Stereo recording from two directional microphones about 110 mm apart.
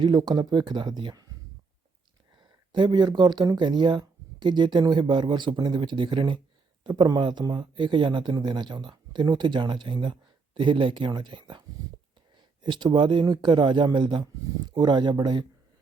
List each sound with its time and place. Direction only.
0.0 s speech: 40° right (ahead or behind)
2.3 s speech: 45° right (ahead or behind)